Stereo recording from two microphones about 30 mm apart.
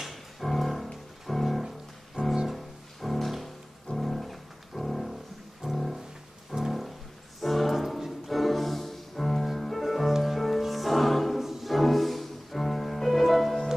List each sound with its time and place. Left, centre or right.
0.0 s music: centre
5.6 s music: centre
6.5 s music: centre
11.3 s music: centre